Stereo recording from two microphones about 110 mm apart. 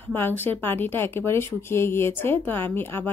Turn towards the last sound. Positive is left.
turn(degrees=20)  # may be behind; listen again after turning